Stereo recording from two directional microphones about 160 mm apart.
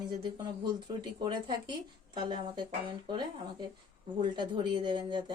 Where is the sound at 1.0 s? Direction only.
30° right (ahead or behind).